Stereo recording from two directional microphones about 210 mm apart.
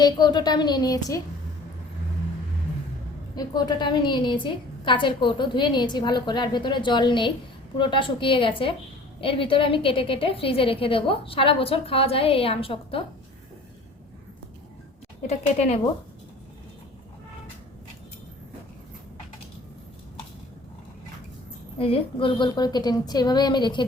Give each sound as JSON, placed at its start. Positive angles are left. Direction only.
{"t": 0.0, "sound": "a woman's voice", "side_deg": 20}
{"t": 3.3, "sound": "a woman's voice", "side_deg": 20}
{"t": 15.3, "sound": "speech", "side_deg": 30}
{"t": 21.8, "sound": "a woman's voice", "side_deg": 25}